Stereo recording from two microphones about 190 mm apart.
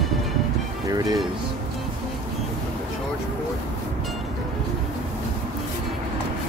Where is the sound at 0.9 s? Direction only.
20° right (ahead or behind).